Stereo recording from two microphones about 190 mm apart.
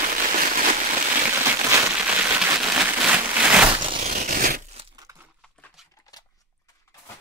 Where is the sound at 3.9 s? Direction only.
50° right (ahead or behind).